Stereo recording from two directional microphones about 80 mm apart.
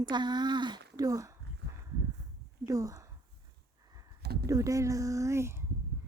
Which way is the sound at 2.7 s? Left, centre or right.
Right.